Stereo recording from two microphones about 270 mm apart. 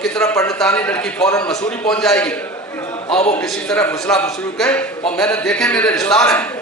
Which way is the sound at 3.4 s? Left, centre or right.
Centre.